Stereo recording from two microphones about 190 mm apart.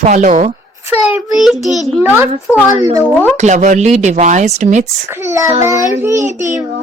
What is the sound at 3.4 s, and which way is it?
Speech, 40° right (ahead or behind).